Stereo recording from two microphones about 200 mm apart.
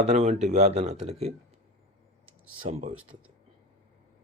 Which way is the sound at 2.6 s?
35° right (ahead or behind).